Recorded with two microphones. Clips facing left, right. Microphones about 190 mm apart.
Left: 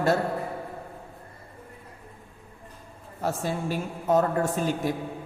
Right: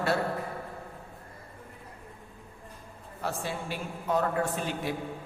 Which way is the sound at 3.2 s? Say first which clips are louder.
Left 5 dB; 45° left (ahead or behind).